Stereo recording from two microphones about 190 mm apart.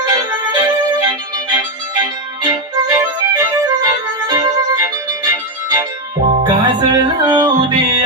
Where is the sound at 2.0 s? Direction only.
20° right (ahead or behind).